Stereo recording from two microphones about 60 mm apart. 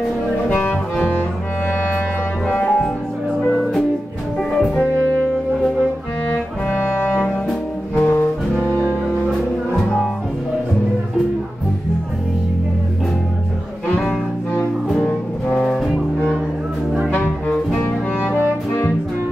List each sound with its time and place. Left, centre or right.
0.5 s music: left
2.6 s music: centre
4.4 s music: centre
6.7 s music: left
15.0 s music: centre
17.1 s brass instrument: left